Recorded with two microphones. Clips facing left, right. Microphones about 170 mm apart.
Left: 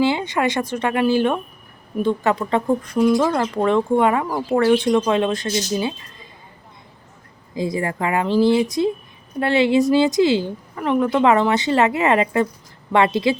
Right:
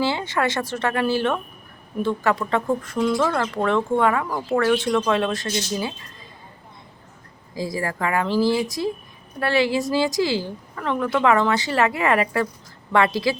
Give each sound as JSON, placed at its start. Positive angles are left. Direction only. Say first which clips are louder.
{"t": 0.0, "sound": "a woman's voice", "louder": "left 4 dB", "side_deg": 15}
{"t": 7.5, "sound": "a woman's voice", "louder": "left 4 dB", "side_deg": 20}